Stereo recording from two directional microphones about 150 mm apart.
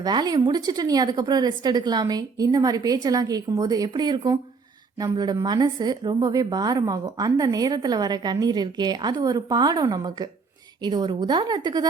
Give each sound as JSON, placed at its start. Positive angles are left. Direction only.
{"t": 0.0, "sound": "a woman's voice", "side_deg": -25}